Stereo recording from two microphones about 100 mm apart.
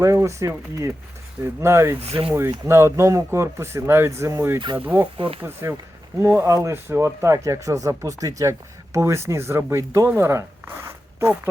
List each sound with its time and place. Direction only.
0.0 s speech: 30° right (ahead or behind)
2.0 s speech: 70° right (ahead or behind)
2.6 s speech: 25° right (ahead or behind)
5.1 s speech: 60° right (ahead or behind)
5.4 s speech: 25° right (ahead or behind)